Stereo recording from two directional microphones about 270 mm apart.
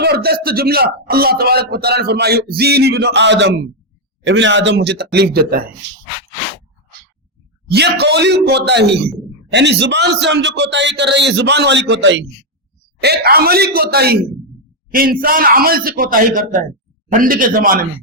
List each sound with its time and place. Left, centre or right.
0.0 s a man's voice: right
7.7 s a man's voice: right